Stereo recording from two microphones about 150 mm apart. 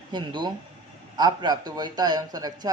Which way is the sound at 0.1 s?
30° right (ahead or behind).